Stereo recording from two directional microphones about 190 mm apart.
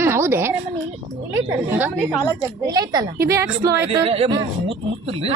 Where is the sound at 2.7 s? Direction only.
20° right (ahead or behind).